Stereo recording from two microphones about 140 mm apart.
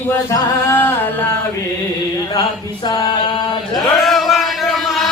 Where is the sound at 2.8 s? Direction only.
30° left (ahead or behind).